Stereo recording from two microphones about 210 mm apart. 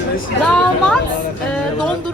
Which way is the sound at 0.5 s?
5° left (ahead or behind).